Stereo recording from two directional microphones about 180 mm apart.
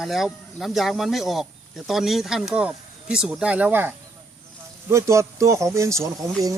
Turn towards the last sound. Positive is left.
turn(degrees=-15)  # may be behind; listen again after turning